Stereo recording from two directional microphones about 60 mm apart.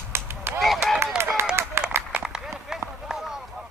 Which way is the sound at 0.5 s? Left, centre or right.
Centre.